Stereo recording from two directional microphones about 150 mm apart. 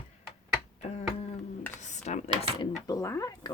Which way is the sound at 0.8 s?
45° left (ahead or behind).